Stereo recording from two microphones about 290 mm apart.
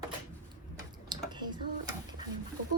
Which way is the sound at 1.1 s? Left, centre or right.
Centre.